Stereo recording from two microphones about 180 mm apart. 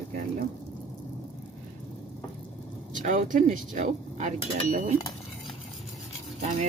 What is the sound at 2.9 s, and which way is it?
Speech, 45° right (ahead or behind).